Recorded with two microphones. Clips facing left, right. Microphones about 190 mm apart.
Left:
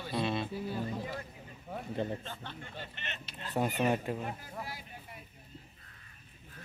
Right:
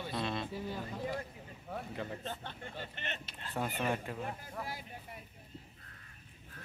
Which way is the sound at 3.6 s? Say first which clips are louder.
Left 5 dB; 15° left (ahead or behind).